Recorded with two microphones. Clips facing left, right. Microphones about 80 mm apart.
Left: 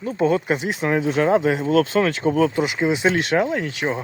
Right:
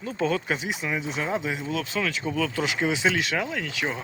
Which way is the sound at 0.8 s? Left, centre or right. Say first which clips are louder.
Left 13 dB; left.